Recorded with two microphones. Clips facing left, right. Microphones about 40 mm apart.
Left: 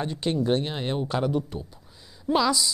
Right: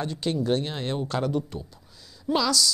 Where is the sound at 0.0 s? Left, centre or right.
Centre.